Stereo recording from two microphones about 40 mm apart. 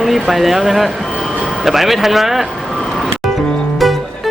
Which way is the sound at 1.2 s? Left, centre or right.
Centre.